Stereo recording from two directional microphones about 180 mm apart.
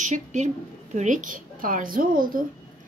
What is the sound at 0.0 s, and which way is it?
A woman's voice, 45° right (ahead or behind).